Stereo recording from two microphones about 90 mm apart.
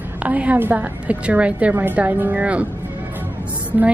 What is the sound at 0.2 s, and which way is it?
A woman's voice, 15° right (ahead or behind).